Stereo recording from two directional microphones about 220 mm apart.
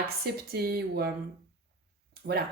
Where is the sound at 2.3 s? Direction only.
50° right (ahead or behind).